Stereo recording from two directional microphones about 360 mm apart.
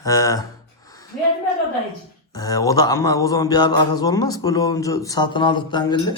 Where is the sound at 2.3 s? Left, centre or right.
Centre.